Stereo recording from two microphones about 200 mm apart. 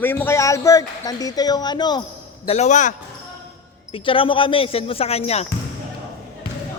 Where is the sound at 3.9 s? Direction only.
25° left (ahead or behind).